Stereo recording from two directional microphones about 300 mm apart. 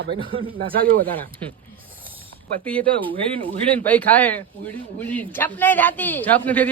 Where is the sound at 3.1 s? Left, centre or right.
Right.